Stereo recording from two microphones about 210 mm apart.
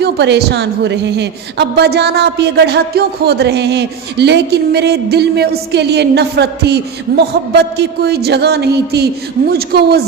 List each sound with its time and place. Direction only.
0.0 s a woman's voice: 50° right (ahead or behind)